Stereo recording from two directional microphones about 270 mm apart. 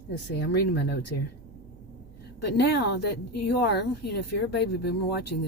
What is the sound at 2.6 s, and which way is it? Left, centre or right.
Speech, left.